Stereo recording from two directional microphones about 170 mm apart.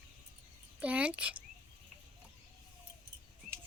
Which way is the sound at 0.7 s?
10° right (ahead or behind).